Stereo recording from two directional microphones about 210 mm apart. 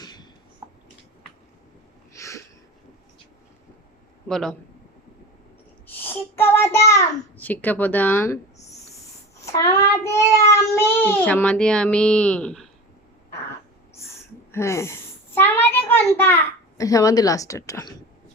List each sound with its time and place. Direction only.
0.0 s a sound: 20° left (ahead or behind)
2.1 s a sound: 15° left (ahead or behind)
4.3 s a man's voice: 5° left (ahead or behind)
5.9 s child singing: 10° left (ahead or behind)
6.8 s a child's voice: 10° left (ahead or behind)
9.5 s child singing: 15° left (ahead or behind)
14.5 s a child's voice: 15° left (ahead or behind)